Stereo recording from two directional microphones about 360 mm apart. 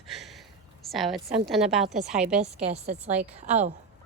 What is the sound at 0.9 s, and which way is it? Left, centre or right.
A woman's voice, centre.